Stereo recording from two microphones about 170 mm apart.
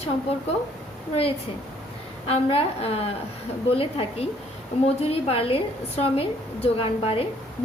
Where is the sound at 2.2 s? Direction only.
35° left (ahead or behind).